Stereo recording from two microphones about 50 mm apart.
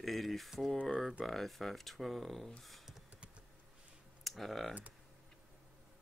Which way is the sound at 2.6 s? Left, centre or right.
Centre.